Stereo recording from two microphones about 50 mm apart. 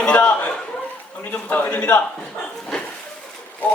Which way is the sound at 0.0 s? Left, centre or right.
Left.